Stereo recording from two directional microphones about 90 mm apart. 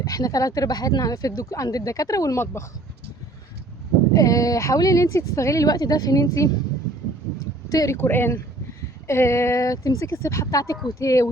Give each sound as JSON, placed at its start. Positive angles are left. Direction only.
{"t": 0.0, "sound": "speech", "side_deg": 40}
{"t": 2.4, "sound": "speech", "side_deg": 25}
{"t": 4.1, "sound": "speech", "side_deg": 40}
{"t": 7.7, "sound": "speech", "side_deg": 40}
{"t": 7.9, "sound": "speech", "side_deg": 25}